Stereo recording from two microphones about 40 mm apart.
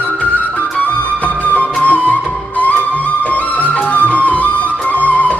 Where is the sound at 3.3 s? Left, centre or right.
Left.